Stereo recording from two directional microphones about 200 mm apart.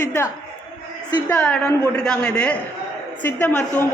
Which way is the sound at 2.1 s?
5° left (ahead or behind).